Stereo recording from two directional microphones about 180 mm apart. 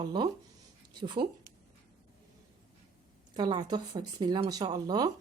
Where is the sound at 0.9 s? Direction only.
25° right (ahead or behind).